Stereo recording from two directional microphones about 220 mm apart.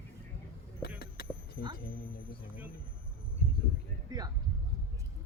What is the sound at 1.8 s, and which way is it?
Speech, 40° left (ahead or behind).